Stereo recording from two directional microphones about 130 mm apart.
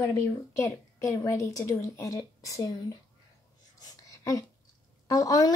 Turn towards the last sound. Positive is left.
turn(degrees=30)  # may be behind; listen again after turning